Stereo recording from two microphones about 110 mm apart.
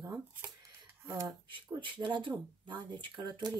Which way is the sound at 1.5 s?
45° right (ahead or behind).